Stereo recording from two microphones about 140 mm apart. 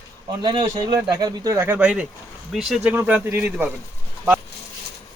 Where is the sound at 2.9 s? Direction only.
15° right (ahead or behind).